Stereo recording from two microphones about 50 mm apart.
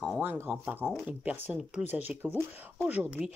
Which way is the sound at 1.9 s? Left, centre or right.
Right.